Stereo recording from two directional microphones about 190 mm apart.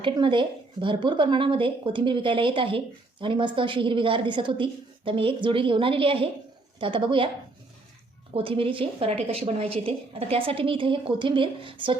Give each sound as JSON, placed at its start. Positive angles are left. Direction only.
{"t": 0.0, "sound": "speech", "side_deg": -25}
{"t": 8.3, "sound": "speech", "side_deg": -30}